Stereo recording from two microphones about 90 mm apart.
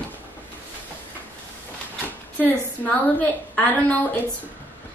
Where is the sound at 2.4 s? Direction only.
20° left (ahead or behind).